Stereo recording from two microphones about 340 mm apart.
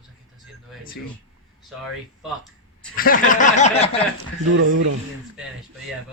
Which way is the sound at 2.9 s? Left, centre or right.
Left.